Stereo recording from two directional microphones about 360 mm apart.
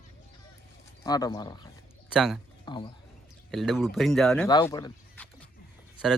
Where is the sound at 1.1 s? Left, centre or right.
Centre.